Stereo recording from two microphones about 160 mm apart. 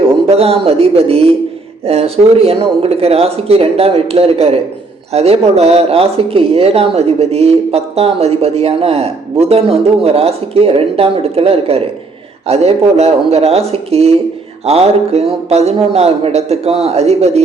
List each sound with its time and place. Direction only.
0.3 s speech: 40° right (ahead or behind)